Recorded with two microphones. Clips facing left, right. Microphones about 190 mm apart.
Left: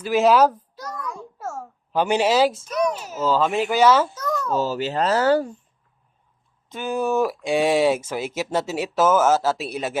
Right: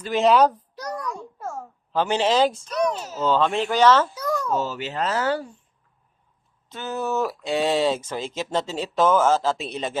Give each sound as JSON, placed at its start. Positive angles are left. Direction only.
{"t": 0.0, "sound": "a child's voice", "side_deg": 5}
{"t": 1.0, "sound": "a sound", "side_deg": 5}
{"t": 1.9, "sound": "speech", "side_deg": 15}
{"t": 4.1, "sound": "a sound", "side_deg": -10}
{"t": 4.5, "sound": "speech", "side_deg": 35}
{"t": 6.7, "sound": "speech", "side_deg": 15}